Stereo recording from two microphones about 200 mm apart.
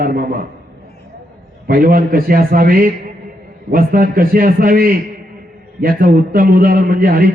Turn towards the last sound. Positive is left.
turn(degrees=-45)  # may be behind; listen again after turning